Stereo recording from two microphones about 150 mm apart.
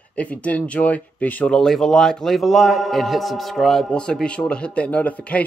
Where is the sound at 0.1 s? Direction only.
10° left (ahead or behind).